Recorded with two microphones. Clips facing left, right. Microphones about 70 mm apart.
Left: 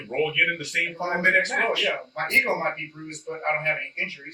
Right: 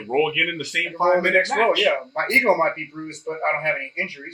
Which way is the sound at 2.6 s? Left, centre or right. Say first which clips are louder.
Right 4 dB; right.